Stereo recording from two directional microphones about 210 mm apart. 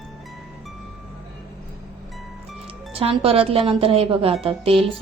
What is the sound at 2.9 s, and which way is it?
Speech, 25° right (ahead or behind).